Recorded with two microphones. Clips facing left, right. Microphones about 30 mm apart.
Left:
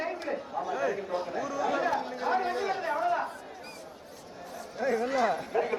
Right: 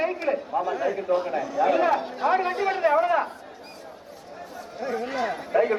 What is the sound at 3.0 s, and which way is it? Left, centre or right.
Speech, right.